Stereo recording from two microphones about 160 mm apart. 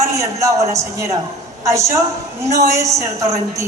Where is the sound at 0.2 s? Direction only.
20° right (ahead or behind).